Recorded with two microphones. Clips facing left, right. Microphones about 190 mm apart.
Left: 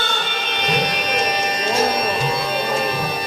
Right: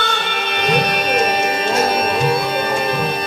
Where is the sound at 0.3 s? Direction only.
60° right (ahead or behind).